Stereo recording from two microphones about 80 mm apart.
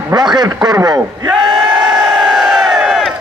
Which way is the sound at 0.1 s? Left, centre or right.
Right.